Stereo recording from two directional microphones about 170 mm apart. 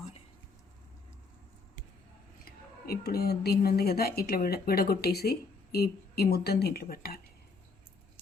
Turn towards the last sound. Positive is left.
turn(degrees=65)  # may be behind; listen again after turning